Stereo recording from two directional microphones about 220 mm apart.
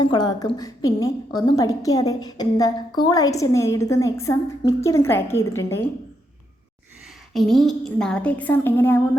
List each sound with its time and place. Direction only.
0.0 s a woman's voice: 20° left (ahead or behind)
7.3 s a woman's voice: centre (ahead or behind)